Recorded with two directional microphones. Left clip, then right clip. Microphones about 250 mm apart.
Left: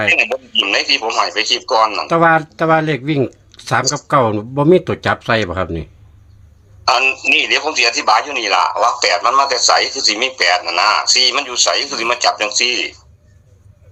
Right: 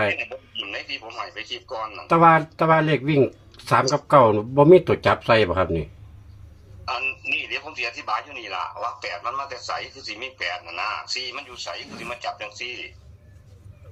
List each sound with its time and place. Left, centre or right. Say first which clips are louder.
0.1 s a man's voice: left 14 dB; left
6.8 s a man's voice: left 13 dB; left